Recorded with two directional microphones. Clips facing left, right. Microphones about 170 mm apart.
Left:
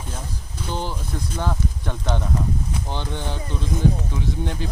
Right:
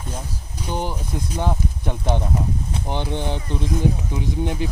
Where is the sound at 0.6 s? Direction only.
15° right (ahead or behind).